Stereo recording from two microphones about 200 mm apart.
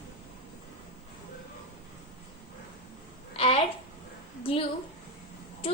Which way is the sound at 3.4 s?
30° left (ahead or behind).